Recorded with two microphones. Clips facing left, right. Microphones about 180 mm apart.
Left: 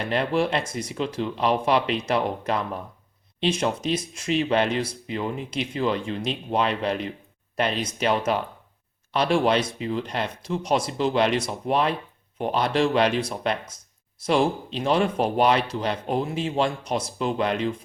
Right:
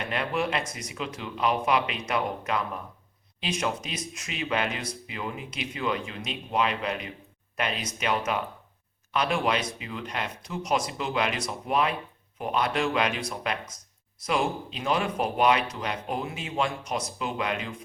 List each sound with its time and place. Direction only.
0.0 s speech: 35° left (ahead or behind)